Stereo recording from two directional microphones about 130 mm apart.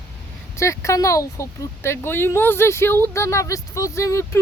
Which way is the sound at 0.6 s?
25° left (ahead or behind).